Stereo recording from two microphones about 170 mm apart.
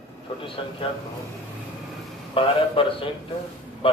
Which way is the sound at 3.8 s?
30° left (ahead or behind).